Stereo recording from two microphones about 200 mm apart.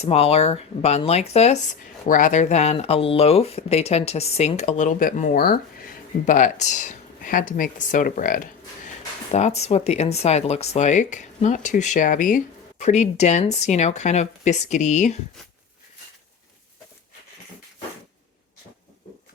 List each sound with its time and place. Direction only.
0.0 s speech: 30° left (ahead or behind)